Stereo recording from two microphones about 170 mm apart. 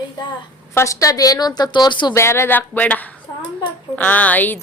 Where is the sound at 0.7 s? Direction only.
15° left (ahead or behind).